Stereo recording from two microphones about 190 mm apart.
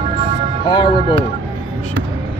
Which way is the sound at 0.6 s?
25° left (ahead or behind).